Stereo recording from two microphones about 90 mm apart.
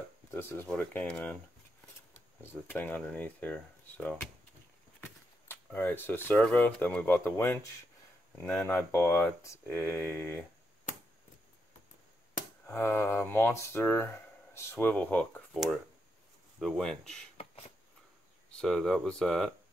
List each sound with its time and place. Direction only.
0.3 s speech: 25° left (ahead or behind)
0.7 s speech: 15° left (ahead or behind)
2.4 s speech: 20° left (ahead or behind)
5.0 s a sound: 25° left (ahead or behind)
6.4 s speech: 15° left (ahead or behind)
8.6 s speech: 25° left (ahead or behind)
12.6 s speech: 25° left (ahead or behind)
15.5 s speech: centre (ahead or behind)
18.5 s speech: 5° left (ahead or behind)